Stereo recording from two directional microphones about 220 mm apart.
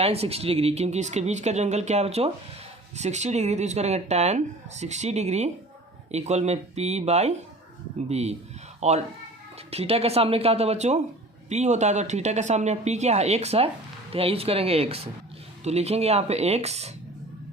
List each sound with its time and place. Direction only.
0.0 s speech: 25° right (ahead or behind)